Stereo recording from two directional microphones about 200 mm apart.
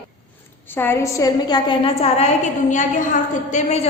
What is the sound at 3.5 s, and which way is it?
Speech, 35° left (ahead or behind).